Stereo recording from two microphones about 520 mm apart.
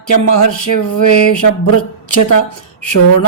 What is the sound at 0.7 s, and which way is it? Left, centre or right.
Speech, left.